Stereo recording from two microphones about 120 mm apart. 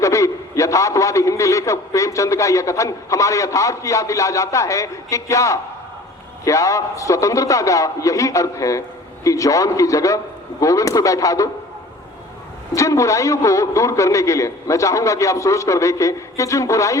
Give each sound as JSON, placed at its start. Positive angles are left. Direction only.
{"t": 0.0, "sound": "a man's voice", "side_deg": 25}
{"t": 12.7, "sound": "a man's voice", "side_deg": 25}